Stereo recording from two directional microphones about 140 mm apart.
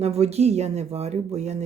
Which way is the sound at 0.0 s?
50° right (ahead or behind).